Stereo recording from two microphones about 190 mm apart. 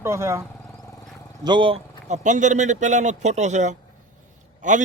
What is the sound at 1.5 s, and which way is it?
A man's voice, 25° right (ahead or behind).